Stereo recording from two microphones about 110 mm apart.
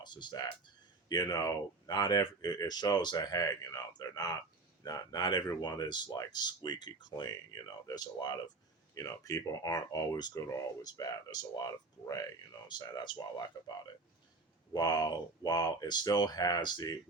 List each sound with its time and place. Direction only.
0.0 s speech: 45° left (ahead or behind)
14.7 s speech: 35° left (ahead or behind)